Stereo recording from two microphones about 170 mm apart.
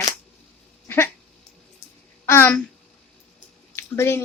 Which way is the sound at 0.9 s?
15° left (ahead or behind).